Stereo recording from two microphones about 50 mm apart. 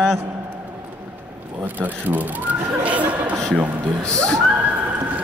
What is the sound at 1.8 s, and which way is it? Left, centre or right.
Speech, right.